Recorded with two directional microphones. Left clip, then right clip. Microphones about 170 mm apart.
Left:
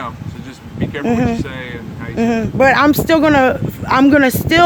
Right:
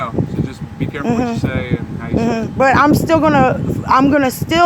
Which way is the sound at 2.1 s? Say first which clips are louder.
Left 1 dB; 30° left (ahead or behind).